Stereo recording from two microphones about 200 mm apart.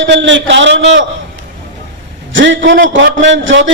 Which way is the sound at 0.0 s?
65° right (ahead or behind).